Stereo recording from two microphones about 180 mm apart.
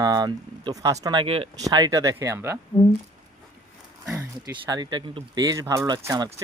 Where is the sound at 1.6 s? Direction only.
20° right (ahead or behind).